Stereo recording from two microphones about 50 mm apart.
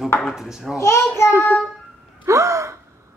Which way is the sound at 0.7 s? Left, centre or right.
Left.